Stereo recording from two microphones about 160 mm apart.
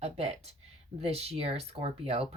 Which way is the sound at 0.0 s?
40° right (ahead or behind).